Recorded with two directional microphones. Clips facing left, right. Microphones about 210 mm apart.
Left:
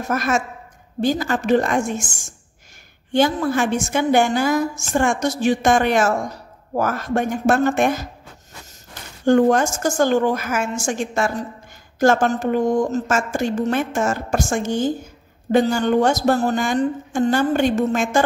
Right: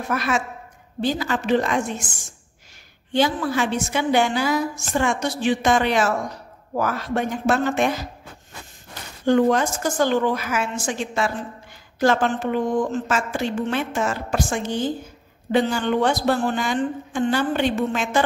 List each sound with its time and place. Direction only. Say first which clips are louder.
0.1 s a woman's voice: left 3 dB; 45° left (ahead or behind)
9.2 s a woman's voice: left 3 dB; 45° left (ahead or behind)